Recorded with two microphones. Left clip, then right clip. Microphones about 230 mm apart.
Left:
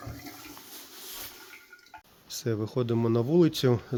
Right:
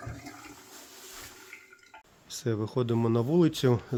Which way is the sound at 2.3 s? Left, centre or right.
Centre.